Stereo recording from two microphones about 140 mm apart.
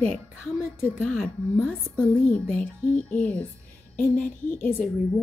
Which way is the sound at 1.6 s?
15° left (ahead or behind).